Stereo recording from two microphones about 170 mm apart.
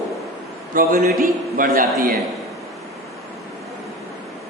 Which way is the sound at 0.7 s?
50° right (ahead or behind).